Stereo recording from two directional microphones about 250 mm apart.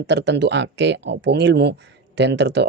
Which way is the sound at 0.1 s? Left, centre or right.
Right.